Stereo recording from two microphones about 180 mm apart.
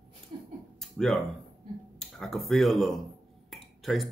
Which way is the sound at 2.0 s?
Centre (ahead or behind).